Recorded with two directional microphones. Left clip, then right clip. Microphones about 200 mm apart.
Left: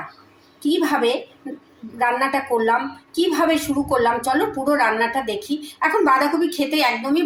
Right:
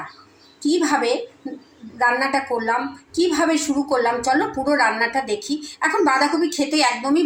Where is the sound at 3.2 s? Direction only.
Centre (ahead or behind).